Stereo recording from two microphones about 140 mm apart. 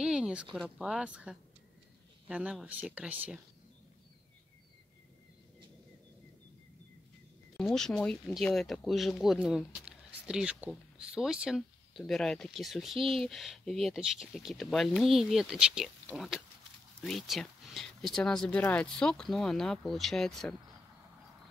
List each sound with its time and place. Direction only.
0.0 s a sound: 5° right (ahead or behind)
0.6 s speech: 5° right (ahead or behind)
7.5 s speech: 5° left (ahead or behind)